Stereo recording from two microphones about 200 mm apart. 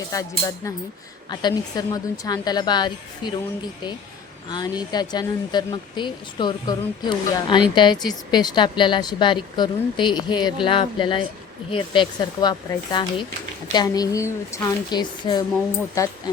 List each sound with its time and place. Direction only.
0.1 s speech: 15° left (ahead or behind)
4.4 s speech: 20° left (ahead or behind)